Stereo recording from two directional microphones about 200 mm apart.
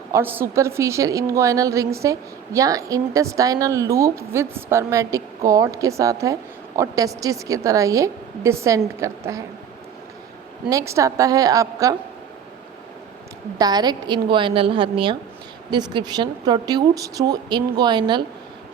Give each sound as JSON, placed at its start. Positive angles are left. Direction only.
{"t": 0.1, "sound": "a woman's voice", "side_deg": -10}
{"t": 10.7, "sound": "a woman's voice", "side_deg": -15}
{"t": 13.6, "sound": "a woman's voice", "side_deg": -20}